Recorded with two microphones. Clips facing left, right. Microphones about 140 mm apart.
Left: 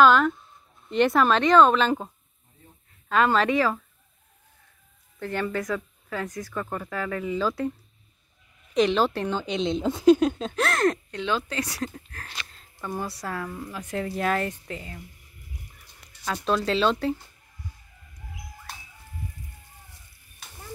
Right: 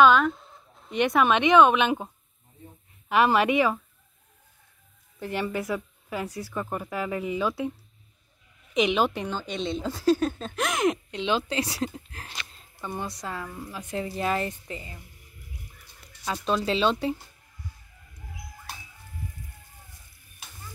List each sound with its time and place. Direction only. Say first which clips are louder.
0.0 s a sound: left 1 dB; centre (ahead or behind)
1.3 s speech: right 1 dB; 15° right (ahead or behind)
3.1 s speech: even; 15° right (ahead or behind)
5.2 s speech: left 1 dB; 10° right (ahead or behind)
7.4 s speech: left 3 dB; 5° right (ahead or behind)
8.7 s speech: left 2 dB; 15° right (ahead or behind)
12.8 s speech: left 2 dB; 5° left (ahead or behind)
13.3 s speech: left 3 dB; 5° right (ahead or behind)
16.3 s speech: left 1 dB; 5° right (ahead or behind)